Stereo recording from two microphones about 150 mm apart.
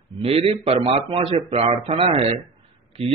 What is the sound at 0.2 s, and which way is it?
Speech, 40° right (ahead or behind).